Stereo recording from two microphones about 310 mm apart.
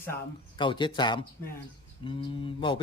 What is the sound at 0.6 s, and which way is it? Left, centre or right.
Speech, centre.